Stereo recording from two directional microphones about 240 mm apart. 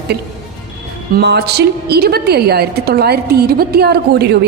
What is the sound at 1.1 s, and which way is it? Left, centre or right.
A woman's voice, right.